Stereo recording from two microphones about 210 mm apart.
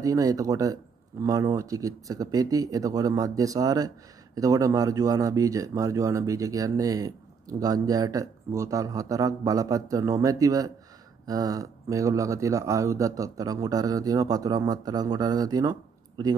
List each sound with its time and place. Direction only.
0.0 s speech: 15° right (ahead or behind)